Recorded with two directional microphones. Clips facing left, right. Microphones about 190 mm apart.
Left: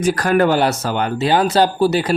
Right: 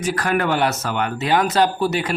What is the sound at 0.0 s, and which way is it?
Speech, 40° left (ahead or behind).